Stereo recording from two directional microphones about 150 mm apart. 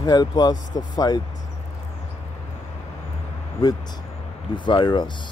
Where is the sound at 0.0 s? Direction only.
25° left (ahead or behind).